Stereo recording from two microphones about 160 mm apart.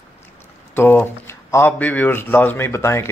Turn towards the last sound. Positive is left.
turn(degrees=15)  # may be behind; listen again after turning